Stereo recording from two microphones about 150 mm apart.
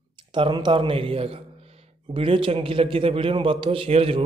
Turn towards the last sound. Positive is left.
turn(degrees=-40)  # may be behind; listen again after turning